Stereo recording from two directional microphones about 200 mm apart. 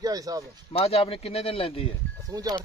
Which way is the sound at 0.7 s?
30° left (ahead or behind).